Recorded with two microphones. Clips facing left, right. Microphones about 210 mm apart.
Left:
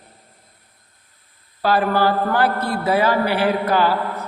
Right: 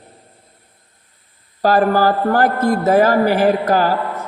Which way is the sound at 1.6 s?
45° right (ahead or behind).